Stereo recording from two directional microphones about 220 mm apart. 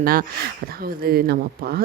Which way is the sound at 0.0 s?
40° right (ahead or behind).